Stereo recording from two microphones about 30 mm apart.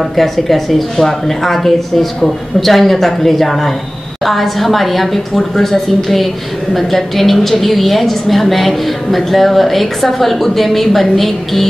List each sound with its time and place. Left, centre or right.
0.1 s a woman's voice: centre